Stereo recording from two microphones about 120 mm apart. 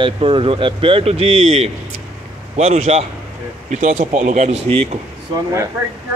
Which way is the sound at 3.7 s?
85° right.